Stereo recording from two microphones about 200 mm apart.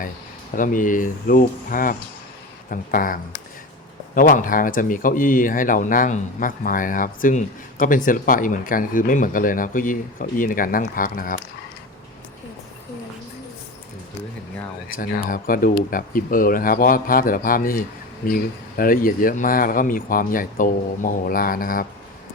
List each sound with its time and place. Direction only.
0.5 s speech: 40° left (ahead or behind)
14.8 s speech: 45° left (ahead or behind)